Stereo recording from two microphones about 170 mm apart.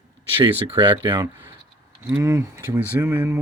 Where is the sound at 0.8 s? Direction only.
30° right (ahead or behind).